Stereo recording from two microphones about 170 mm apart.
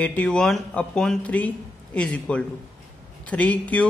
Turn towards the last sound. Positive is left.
turn(degrees=10)  # may be behind; listen again after turning